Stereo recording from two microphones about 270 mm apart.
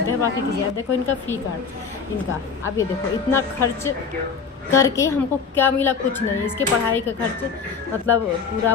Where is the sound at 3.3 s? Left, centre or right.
Centre.